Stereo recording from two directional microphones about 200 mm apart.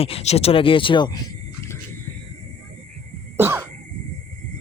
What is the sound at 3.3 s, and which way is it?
Cough, 10° right (ahead or behind).